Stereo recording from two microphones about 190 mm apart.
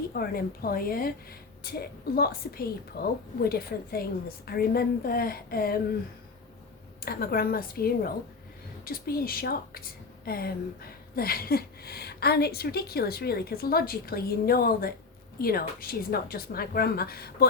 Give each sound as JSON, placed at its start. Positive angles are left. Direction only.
{"t": 0.1, "sound": "a woman's voice", "side_deg": 50}
{"t": 7.0, "sound": "a woman's voice", "side_deg": 50}